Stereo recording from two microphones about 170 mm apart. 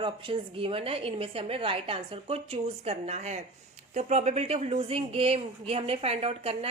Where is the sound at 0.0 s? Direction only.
30° right (ahead or behind).